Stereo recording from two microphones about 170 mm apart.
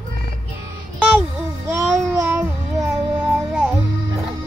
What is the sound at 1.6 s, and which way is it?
Child singing, 15° right (ahead or behind).